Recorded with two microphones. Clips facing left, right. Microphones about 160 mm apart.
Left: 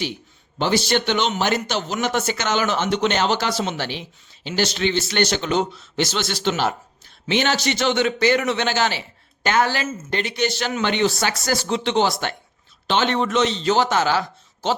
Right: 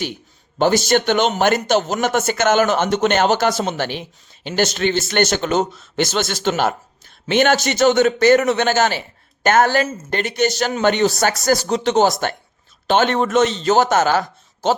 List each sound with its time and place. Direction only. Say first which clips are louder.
0.6 s a man's voice: right 4 dB; 45° right (ahead or behind)